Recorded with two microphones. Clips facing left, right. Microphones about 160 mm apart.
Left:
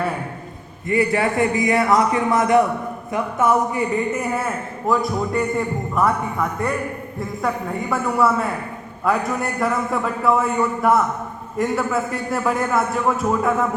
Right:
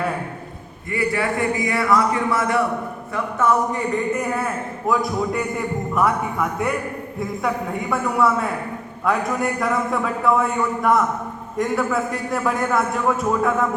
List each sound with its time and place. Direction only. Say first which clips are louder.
0.9 s a man's voice: left 3 dB; 25° left (ahead or behind); by 6.1 s centre (ahead or behind)
7.2 s a man's voice: even; centre (ahead or behind)